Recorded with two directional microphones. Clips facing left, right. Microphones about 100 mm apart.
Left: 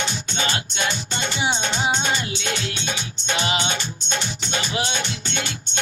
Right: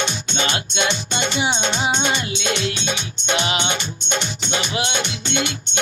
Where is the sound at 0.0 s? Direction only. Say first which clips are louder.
Right 2 dB; 20° right (ahead or behind).